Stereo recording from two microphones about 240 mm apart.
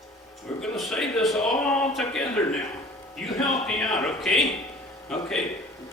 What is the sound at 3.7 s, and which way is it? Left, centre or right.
Speech, centre.